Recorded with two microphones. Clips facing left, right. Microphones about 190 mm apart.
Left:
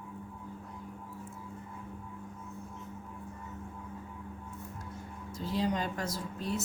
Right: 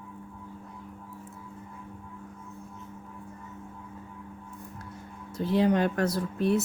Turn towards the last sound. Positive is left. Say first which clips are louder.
# right 10 dB
turn(degrees=-65)  # may be behind; listen again after turning